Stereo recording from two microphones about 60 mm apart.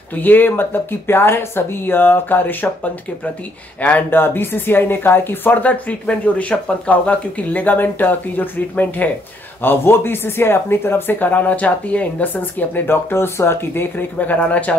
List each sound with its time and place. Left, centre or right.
0.1 s speech: left
4.1 s speech: left